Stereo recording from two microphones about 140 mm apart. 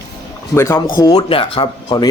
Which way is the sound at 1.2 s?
40° left (ahead or behind).